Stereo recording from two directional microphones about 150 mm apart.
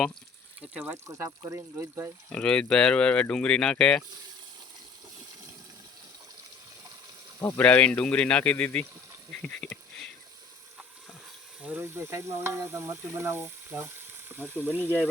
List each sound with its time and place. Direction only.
0.6 s sizzle: 10° right (ahead or behind)
2.3 s speech: 5° left (ahead or behind)
7.3 s speech: 20° left (ahead or behind)
7.6 s speech: 10° left (ahead or behind)
9.4 s a sound: 10° left (ahead or behind)
11.6 s sizzle: 10° right (ahead or behind)